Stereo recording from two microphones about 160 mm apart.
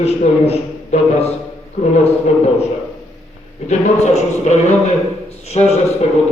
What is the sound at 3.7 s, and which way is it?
A man's voice, 45° left (ahead or behind).